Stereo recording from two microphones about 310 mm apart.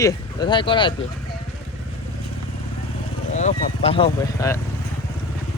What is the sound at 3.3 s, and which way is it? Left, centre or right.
Speech, left.